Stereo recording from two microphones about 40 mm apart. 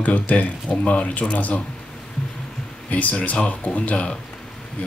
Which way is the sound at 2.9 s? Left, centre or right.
Left.